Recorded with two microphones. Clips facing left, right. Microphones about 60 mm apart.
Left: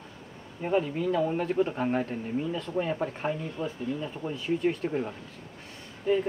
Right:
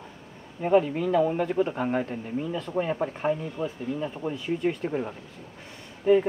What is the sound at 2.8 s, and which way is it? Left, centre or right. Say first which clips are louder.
Speech: right 3 dB; centre.